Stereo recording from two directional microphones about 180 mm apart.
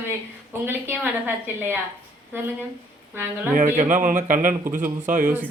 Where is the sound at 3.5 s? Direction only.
45° right (ahead or behind).